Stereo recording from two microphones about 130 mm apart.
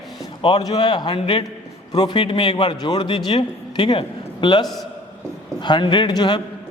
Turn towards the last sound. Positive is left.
turn(degrees=35)  # may be behind; listen again after turning